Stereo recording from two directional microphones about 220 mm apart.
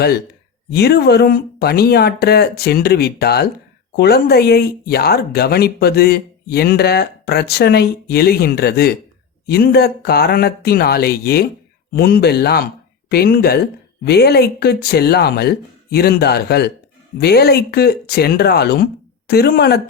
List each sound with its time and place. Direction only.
0.7 s speech: 45° left (ahead or behind)